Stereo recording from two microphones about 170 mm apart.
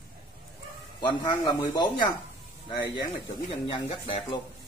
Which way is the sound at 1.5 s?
25° left (ahead or behind).